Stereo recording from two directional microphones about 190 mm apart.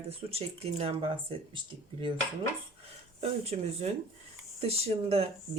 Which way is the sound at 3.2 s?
35° right (ahead or behind).